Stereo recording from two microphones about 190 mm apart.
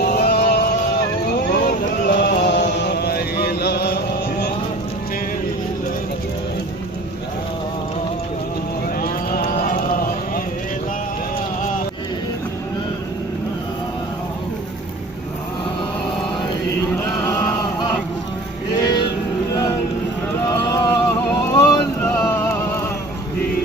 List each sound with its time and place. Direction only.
0.1 s music: 55° left (ahead or behind)
1.6 s a sound: 60° left (ahead or behind)
9.0 s run: 50° left (ahead or behind)
18.7 s music: 20° left (ahead or behind)
20.5 s vehicle: 20° left (ahead or behind)
22.2 s music: 10° left (ahead or behind)